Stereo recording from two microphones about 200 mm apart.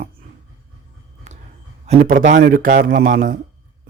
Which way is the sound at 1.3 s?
35° right (ahead or behind).